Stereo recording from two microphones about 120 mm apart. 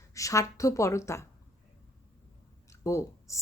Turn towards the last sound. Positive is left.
turn(degrees=25)  # may be behind; listen again after turning